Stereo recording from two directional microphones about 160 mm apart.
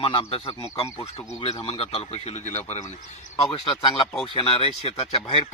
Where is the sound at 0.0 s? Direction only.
35° left (ahead or behind).